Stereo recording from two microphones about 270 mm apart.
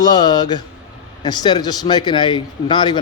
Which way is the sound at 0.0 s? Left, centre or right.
Centre.